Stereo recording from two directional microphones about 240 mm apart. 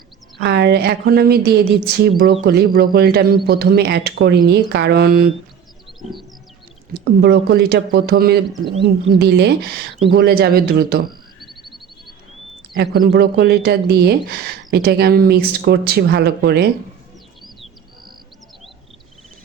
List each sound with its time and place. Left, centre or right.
0.3 s speech: right
6.0 s bird: centre
7.0 s speech: right
11.4 s a sound: centre
12.7 s speech: right